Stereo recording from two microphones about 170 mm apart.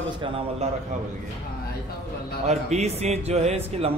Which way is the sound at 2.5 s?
40° right (ahead or behind).